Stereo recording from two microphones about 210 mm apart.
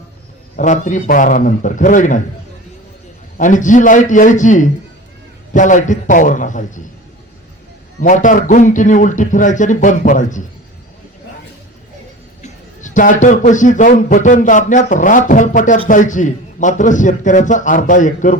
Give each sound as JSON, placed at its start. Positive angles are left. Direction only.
{"t": 0.5, "sound": "a man's voice", "side_deg": 35}
{"t": 3.3, "sound": "a man's voice", "side_deg": 35}
{"t": 8.0, "sound": "a man's voice", "side_deg": 40}
{"t": 12.4, "sound": "a man's voice", "side_deg": 35}